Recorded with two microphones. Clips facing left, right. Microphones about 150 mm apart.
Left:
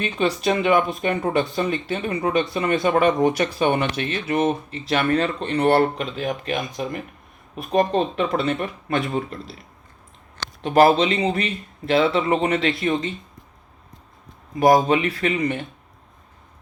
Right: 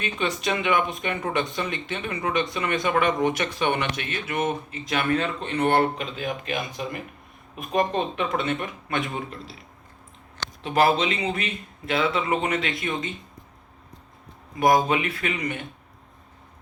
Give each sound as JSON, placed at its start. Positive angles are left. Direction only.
{"t": 0.4, "sound": "speech", "side_deg": 40}
{"t": 3.7, "sound": "speech", "side_deg": 30}
{"t": 10.8, "sound": "speech", "side_deg": 35}
{"t": 14.6, "sound": "speech", "side_deg": 35}